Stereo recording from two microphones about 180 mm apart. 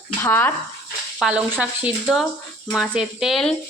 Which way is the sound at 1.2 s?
5° right (ahead or behind).